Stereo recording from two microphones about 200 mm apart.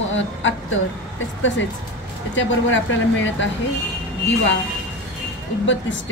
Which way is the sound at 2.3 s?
65° left (ahead or behind).